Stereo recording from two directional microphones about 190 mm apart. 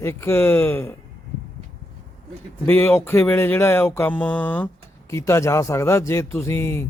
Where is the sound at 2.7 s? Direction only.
10° left (ahead or behind).